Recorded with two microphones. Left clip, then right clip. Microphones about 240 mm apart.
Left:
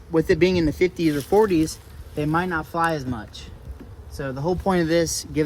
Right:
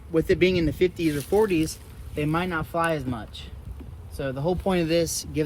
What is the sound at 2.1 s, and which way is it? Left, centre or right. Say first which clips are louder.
Speech: left 3 dB; centre.